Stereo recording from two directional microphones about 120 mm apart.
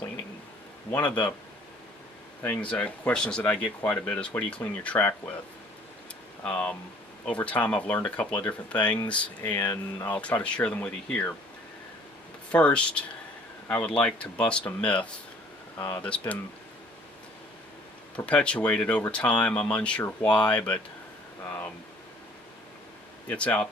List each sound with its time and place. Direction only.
0.9 s speech: 15° left (ahead or behind)
2.4 s speech: 15° left (ahead or behind)
6.4 s speech: 10° left (ahead or behind)
12.5 s speech: 10° left (ahead or behind)
18.2 s speech: 10° left (ahead or behind)
23.3 s speech: 10° left (ahead or behind)